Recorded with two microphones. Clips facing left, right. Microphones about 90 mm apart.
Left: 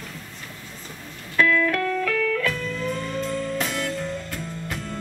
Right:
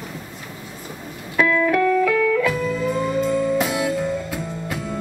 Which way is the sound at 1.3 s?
15° right (ahead or behind).